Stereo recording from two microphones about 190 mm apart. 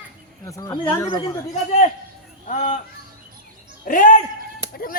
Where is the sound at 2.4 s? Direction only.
40° left (ahead or behind).